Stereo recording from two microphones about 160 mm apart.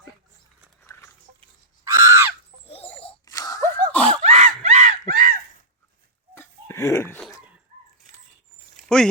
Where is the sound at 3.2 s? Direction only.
20° left (ahead or behind).